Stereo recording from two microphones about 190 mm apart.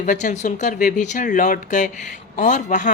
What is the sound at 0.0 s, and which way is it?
Speech, 40° left (ahead or behind).